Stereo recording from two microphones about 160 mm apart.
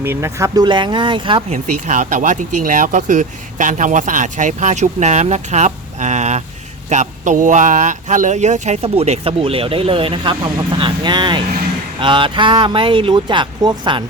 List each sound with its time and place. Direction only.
0.0 s speech: 15° right (ahead or behind); by 1.5 s 30° right (ahead or behind)
1.5 s speech: 50° right (ahead or behind); by 14.0 s 30° right (ahead or behind)